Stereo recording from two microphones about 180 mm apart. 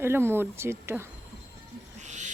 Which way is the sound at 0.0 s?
15° right (ahead or behind).